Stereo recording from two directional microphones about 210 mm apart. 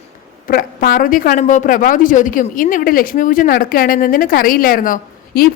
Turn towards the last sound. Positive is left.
turn(degrees=40)  # may be behind; listen again after turning